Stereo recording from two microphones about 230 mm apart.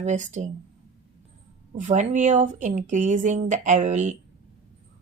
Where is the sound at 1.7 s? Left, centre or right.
Right.